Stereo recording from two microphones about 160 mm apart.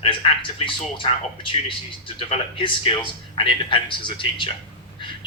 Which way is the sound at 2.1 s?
35° left (ahead or behind).